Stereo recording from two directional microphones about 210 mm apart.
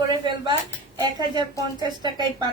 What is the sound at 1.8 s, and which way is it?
Speech, 20° right (ahead or behind).